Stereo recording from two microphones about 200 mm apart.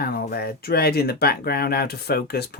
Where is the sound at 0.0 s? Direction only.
50° left (ahead or behind).